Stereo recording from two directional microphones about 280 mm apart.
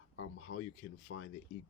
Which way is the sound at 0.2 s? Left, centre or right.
Left.